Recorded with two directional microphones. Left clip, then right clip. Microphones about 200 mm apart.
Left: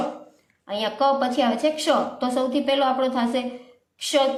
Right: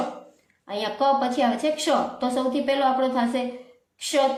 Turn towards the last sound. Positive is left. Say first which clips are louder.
# left 1 dB
turn(degrees=20)  # may be behind; listen again after turning